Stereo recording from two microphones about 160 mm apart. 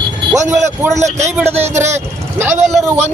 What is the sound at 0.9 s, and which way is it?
Speech, 45° right (ahead or behind).